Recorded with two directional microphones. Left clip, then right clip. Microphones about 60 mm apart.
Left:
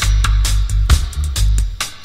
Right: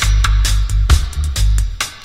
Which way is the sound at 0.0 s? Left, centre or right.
Left.